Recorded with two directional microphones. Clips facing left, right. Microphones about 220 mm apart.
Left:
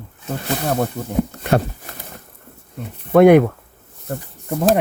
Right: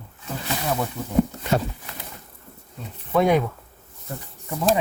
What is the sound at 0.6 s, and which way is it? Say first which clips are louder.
Speech: left 5 dB; 45° left (ahead or behind).